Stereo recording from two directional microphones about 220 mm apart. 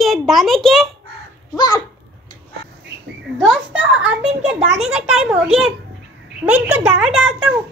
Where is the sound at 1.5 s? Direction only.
20° left (ahead or behind).